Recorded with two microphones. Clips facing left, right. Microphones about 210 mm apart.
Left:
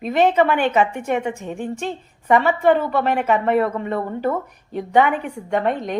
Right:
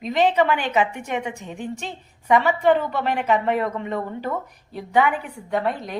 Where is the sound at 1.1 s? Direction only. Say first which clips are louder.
Left 5 dB; 55° left (ahead or behind).